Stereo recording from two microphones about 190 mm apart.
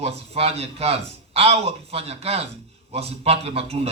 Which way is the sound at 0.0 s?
30° right (ahead or behind).